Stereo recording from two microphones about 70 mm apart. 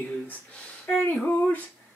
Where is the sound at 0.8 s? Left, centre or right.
Left.